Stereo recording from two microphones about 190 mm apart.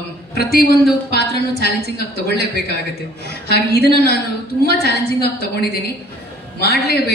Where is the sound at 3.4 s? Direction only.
55° left (ahead or behind).